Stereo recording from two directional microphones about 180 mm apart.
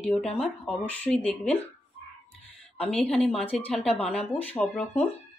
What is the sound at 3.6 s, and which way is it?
Speech, centre (ahead or behind).